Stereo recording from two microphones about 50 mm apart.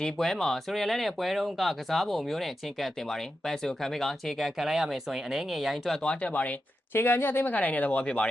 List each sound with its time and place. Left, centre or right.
0.0 s speech: centre
6.0 s speech: centre
6.3 s speech: left
6.9 s speech: left